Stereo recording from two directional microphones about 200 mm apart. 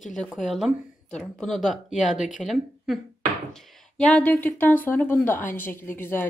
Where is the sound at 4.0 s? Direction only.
5° left (ahead or behind).